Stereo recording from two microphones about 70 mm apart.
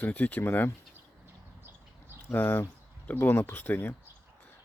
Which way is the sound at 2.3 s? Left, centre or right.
Left.